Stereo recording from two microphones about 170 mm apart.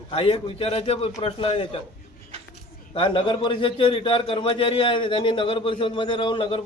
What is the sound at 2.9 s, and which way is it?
A man's voice, 30° left (ahead or behind).